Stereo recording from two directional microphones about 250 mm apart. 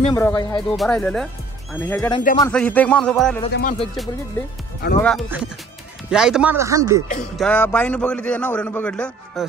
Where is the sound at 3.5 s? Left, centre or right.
Left.